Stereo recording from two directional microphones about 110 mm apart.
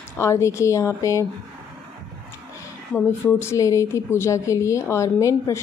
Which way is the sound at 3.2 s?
25° left (ahead or behind).